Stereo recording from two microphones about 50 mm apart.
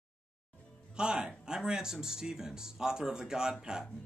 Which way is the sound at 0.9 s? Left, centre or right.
Centre.